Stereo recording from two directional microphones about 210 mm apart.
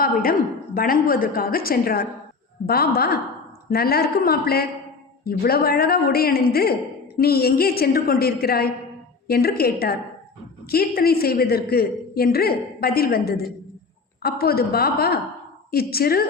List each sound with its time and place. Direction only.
0.0 s a man's voice: 45° left (ahead or behind)